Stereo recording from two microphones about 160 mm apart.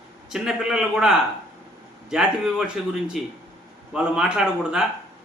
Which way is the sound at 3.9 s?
5° right (ahead or behind).